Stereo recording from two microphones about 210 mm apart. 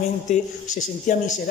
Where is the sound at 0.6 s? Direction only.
75° left (ahead or behind).